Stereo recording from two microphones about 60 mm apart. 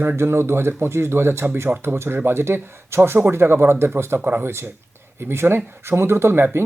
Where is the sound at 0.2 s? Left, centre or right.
Right.